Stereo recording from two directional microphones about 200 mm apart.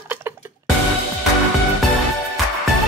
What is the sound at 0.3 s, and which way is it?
Music, 10° right (ahead or behind).